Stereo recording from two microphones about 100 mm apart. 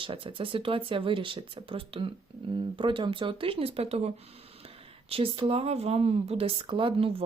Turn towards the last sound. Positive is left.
turn(degrees=-65)  # may be behind; listen again after turning